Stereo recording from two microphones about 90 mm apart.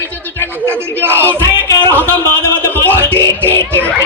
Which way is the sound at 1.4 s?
25° left (ahead or behind).